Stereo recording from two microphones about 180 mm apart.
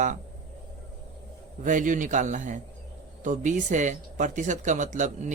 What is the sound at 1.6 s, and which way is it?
Speech, 45° right (ahead or behind).